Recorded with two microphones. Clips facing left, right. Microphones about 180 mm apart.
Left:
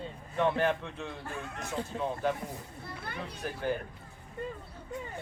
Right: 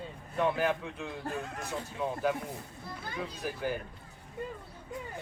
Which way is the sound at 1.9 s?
40° left (ahead or behind).